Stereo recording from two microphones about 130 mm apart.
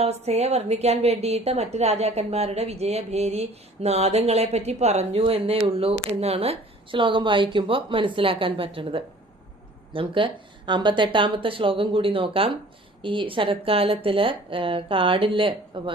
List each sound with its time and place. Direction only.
0.0 s a woman's voice: 55° right (ahead or behind)